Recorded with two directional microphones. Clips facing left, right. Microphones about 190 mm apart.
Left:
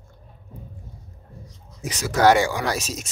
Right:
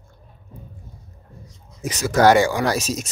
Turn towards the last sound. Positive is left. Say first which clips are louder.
# right 4 dB
turn(degrees=-40)  # may be behind; listen again after turning